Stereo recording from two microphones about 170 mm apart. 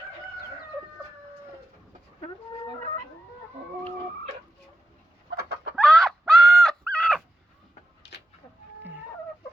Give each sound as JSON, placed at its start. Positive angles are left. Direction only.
{"t": 2.2, "sound": "chicken", "side_deg": 35}
{"t": 5.7, "sound": "fowl", "side_deg": 5}